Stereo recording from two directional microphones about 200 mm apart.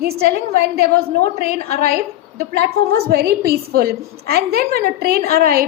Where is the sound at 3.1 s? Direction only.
50° right (ahead or behind).